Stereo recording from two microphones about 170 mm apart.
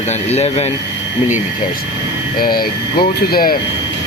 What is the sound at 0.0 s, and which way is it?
Speech, 40° left (ahead or behind).